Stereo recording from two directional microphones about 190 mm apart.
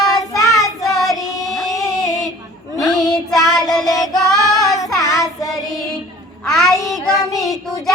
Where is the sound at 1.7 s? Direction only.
15° left (ahead or behind).